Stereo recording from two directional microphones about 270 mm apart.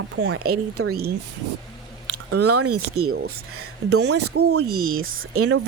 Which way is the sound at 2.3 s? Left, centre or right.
Right.